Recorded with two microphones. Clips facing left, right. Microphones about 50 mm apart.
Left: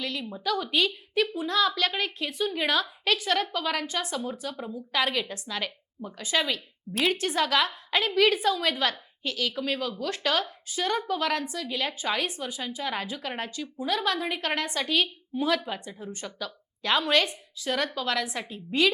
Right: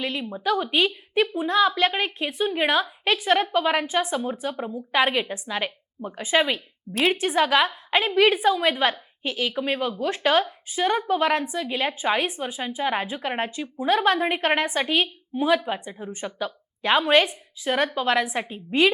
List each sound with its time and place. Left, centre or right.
0.0 s speech: right